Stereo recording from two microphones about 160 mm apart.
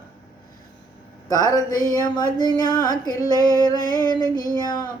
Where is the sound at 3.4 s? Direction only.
25° right (ahead or behind).